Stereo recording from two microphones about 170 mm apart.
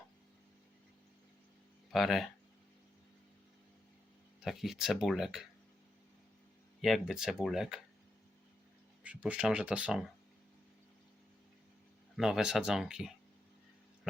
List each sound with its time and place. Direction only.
1.9 s speech: centre (ahead or behind)
4.4 s speech: centre (ahead or behind)
6.8 s speech: centre (ahead or behind)
9.0 s speech: 5° right (ahead or behind)
12.1 s speech: centre (ahead or behind)